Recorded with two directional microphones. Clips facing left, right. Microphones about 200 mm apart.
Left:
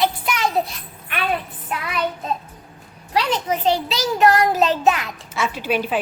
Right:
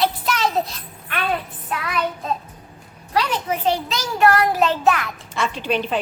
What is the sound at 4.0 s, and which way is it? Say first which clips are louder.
Child singing: left 1 dB; 20° left (ahead or behind).